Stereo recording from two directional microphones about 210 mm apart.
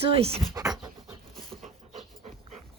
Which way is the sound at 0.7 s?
5° right (ahead or behind).